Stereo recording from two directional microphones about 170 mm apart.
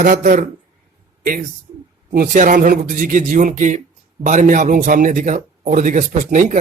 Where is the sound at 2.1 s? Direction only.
55° right (ahead or behind).